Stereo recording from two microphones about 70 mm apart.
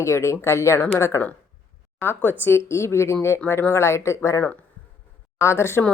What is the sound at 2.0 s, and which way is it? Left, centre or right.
A woman's voice, left.